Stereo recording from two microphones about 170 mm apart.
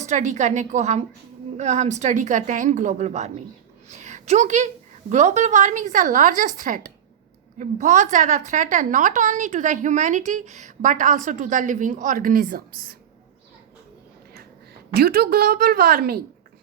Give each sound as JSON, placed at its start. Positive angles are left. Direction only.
{"t": 0.0, "sound": "a woman's voice", "side_deg": -45}
{"t": 14.9, "sound": "a woman's voice", "side_deg": -65}